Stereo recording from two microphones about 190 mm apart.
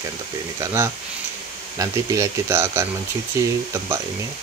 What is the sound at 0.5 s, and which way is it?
Speech, 15° right (ahead or behind).